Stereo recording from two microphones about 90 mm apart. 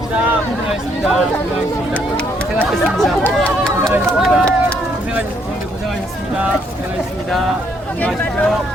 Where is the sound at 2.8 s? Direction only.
Centre (ahead or behind).